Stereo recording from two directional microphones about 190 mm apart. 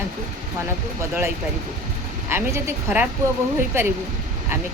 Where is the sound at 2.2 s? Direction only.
10° right (ahead or behind).